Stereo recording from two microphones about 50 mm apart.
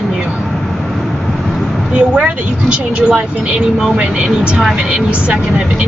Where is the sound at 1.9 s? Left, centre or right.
Right.